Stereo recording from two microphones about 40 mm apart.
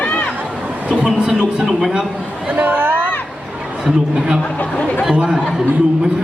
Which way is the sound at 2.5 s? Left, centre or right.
Right.